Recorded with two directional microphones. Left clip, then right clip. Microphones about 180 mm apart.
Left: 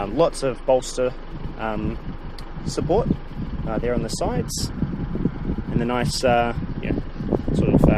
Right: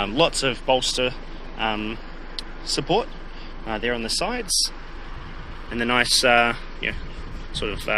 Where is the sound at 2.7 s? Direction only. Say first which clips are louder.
Left 1 dB; 20° left (ahead or behind).